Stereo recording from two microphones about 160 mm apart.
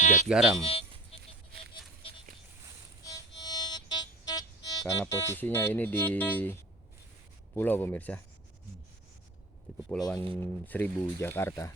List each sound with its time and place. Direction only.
0.0 s music: 50° left (ahead or behind)
0.3 s speech: centre (ahead or behind)
0.6 s speech: 35° left (ahead or behind)
3.1 s music: 25° left (ahead or behind)
7.5 s speech: 10° left (ahead or behind)
9.9 s speech: 5° left (ahead or behind)